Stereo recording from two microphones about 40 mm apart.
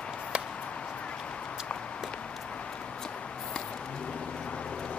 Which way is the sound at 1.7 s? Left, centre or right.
Left.